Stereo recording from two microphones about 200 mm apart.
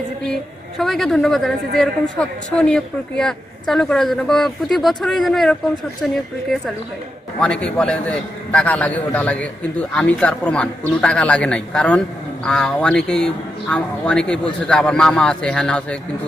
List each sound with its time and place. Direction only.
0.7 s a woman's voice: centre (ahead or behind)